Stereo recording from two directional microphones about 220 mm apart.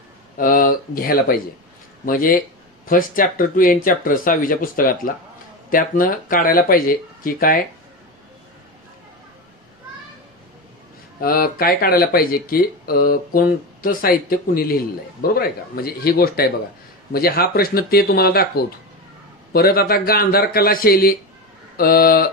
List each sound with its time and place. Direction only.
0.4 s speech: 40° left (ahead or behind)
11.1 s speech: 40° left (ahead or behind)
19.5 s speech: 45° left (ahead or behind)